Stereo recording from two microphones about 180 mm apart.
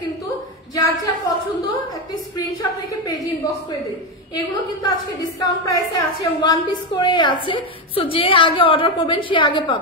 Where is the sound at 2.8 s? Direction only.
20° left (ahead or behind).